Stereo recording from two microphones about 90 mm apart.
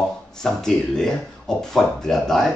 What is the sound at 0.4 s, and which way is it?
Speech, 5° left (ahead or behind).